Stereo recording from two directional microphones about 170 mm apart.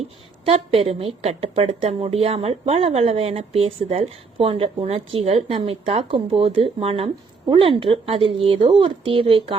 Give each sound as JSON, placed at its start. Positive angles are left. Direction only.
{"t": 0.0, "sound": "a woman's voice", "side_deg": -35}